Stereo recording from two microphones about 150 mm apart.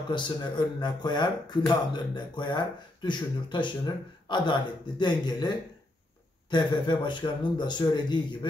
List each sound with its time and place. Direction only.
0.1 s speech: 30° left (ahead or behind)